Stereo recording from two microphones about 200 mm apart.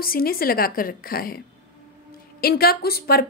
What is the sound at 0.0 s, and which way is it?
A woman's voice, 45° left (ahead or behind).